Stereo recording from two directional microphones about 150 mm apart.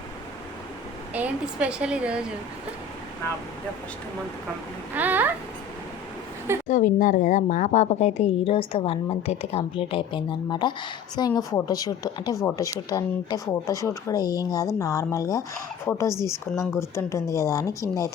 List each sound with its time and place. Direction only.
1.1 s a woman's voice: 10° right (ahead or behind)
4.9 s a woman's voice: 10° right (ahead or behind)
6.7 s a woman's voice: 60° left (ahead or behind); by 18.1 s 20° left (ahead or behind)